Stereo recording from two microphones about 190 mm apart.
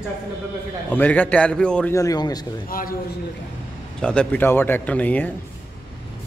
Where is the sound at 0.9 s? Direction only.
10° left (ahead or behind).